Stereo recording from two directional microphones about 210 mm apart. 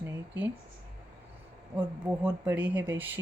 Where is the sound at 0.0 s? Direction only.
10° right (ahead or behind).